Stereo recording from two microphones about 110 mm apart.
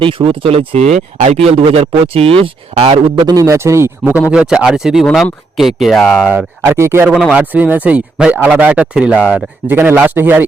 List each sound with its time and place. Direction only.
0.0 s speech: 55° right (ahead or behind)
2.9 s speech: 35° right (ahead or behind)
4.3 s speech: 10° right (ahead or behind)
6.3 s speech: 25° right (ahead or behind)